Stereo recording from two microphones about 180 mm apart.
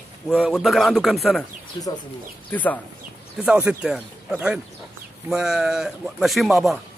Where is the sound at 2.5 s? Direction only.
10° left (ahead or behind).